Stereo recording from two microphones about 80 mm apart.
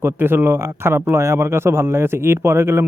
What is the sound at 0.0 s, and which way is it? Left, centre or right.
A man's voice, right.